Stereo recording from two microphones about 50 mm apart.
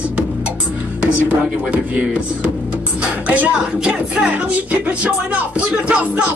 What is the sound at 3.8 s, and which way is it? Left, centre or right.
Speech, centre.